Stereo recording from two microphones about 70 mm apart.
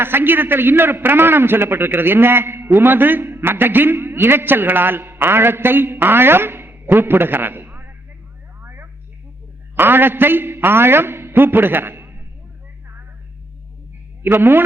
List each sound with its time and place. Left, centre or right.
0.0 s a man's voice: right
8.6 s a sound: right
9.7 s a man's voice: right
14.2 s a woman's voice: right